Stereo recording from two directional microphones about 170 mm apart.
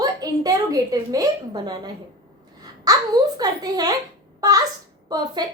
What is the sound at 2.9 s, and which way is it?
A woman's voice, 20° right (ahead or behind).